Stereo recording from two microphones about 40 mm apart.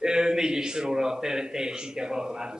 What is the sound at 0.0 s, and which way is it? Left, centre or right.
A man's voice, centre.